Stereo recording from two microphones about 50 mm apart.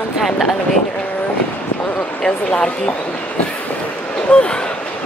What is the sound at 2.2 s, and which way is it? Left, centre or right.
Speech, centre.